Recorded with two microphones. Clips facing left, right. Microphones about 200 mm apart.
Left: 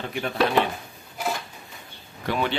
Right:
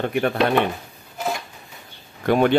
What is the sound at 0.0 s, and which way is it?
Chopping, 60° right (ahead or behind).